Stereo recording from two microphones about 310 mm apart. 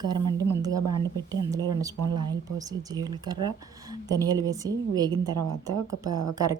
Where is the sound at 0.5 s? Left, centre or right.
Centre.